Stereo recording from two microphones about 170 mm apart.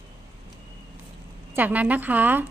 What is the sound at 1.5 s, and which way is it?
Speech, 10° right (ahead or behind).